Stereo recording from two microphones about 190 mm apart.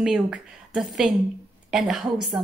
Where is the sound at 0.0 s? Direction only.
5° right (ahead or behind).